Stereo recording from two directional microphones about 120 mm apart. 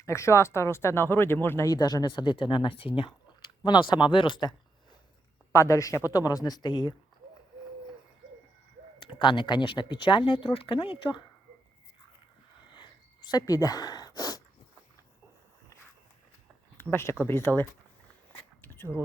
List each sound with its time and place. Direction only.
0.0 s speech: 25° left (ahead or behind)
5.5 s speech: 25° left (ahead or behind)
9.0 s speech: 40° left (ahead or behind)
12.7 s a sound: 40° left (ahead or behind)
16.7 s speech: 20° left (ahead or behind)
18.6 s a sound: 20° left (ahead or behind)